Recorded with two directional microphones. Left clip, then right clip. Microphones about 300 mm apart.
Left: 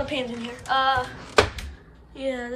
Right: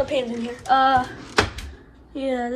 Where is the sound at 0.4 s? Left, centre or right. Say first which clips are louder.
Right 6 dB; centre.